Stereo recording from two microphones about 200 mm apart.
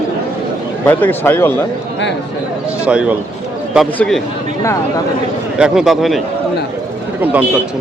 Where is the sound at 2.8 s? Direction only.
5° right (ahead or behind).